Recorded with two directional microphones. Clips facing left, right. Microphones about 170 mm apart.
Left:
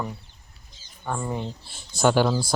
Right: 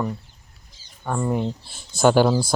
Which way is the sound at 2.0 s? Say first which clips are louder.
Right 4 dB; 40° right (ahead or behind).